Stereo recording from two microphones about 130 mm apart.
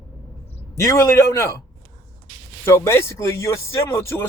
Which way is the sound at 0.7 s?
20° left (ahead or behind).